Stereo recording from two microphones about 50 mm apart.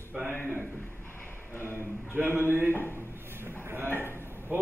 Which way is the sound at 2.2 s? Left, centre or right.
Right.